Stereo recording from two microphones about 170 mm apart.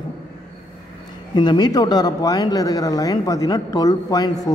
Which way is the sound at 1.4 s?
25° left (ahead or behind).